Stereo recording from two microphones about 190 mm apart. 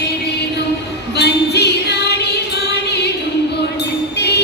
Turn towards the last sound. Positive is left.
turn(degrees=60)  # may be behind; listen again after turning